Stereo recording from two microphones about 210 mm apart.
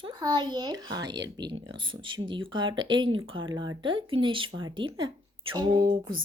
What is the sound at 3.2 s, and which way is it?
Speech, 70° right (ahead or behind).